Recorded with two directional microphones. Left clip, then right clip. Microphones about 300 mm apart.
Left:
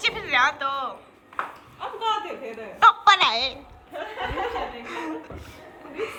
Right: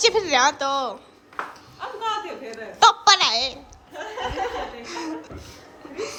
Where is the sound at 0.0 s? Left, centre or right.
Right.